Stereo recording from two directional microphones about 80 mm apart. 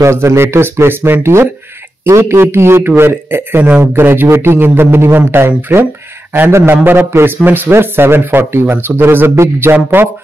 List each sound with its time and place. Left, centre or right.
0.0 s a man's voice: right